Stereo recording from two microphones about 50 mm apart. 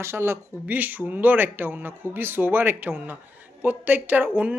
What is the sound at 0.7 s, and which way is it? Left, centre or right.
Speech, right.